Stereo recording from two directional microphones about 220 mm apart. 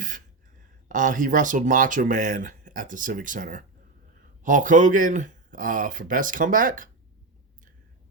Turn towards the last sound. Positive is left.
turn(degrees=-40)  # may be behind; listen again after turning